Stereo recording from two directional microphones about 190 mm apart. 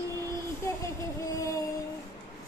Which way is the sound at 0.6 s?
15° left (ahead or behind).